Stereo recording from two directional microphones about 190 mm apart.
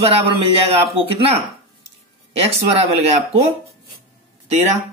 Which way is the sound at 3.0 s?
35° right (ahead or behind).